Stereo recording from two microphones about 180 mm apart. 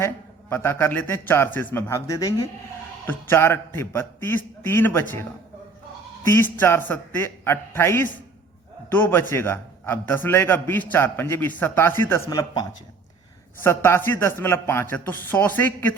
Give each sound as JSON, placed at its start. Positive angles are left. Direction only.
{"t": 0.5, "sound": "speech", "side_deg": 15}
{"t": 6.3, "sound": "speech", "side_deg": 10}
{"t": 13.7, "sound": "speech", "side_deg": 15}